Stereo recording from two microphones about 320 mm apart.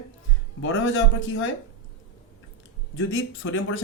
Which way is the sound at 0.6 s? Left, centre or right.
Left.